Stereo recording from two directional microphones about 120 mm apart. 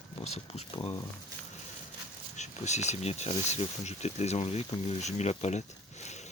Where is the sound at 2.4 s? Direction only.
75° left (ahead or behind).